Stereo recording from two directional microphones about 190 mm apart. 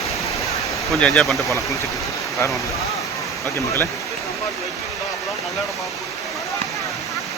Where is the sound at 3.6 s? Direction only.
15° left (ahead or behind).